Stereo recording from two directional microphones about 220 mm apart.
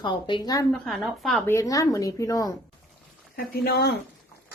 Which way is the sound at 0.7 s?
Centre (ahead or behind).